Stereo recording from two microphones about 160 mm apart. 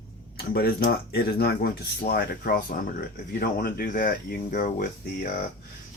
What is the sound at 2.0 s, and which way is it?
Speech, 70° left (ahead or behind).